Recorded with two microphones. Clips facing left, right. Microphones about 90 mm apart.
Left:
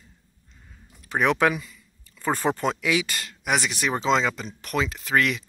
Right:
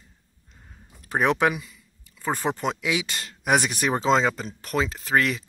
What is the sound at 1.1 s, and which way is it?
Speech, 30° right (ahead or behind).